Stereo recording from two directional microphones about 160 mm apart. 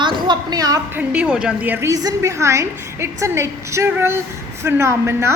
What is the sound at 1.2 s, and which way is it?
A woman's voice, 5° right (ahead or behind).